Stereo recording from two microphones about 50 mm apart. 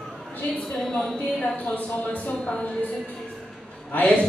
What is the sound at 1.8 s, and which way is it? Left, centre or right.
Speech, left.